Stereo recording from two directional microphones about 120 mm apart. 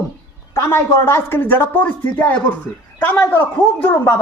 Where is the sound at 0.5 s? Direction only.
20° left (ahead or behind).